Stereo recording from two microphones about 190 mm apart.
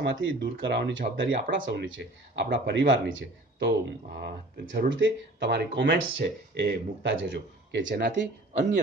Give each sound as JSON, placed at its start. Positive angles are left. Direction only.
{"t": 0.0, "sound": "speech", "side_deg": -70}